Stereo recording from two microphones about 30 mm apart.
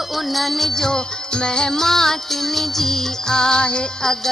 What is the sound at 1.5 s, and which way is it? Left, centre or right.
Music, centre.